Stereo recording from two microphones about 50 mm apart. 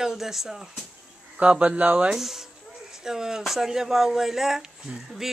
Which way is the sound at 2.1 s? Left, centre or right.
Centre.